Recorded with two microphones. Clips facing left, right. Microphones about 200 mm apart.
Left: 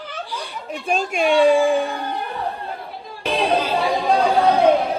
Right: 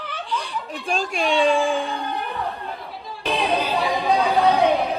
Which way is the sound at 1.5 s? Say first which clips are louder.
Left 4 dB; 15° left (ahead or behind).